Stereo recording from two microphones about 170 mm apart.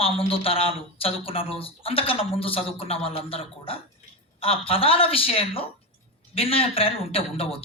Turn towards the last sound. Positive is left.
turn(degrees=35)  # may be behind; listen again after turning